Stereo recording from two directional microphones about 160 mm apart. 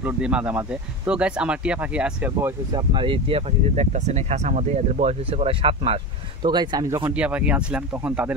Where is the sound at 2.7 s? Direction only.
30° right (ahead or behind).